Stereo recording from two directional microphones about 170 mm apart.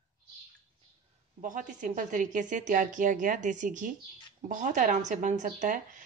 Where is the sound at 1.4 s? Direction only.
50° right (ahead or behind).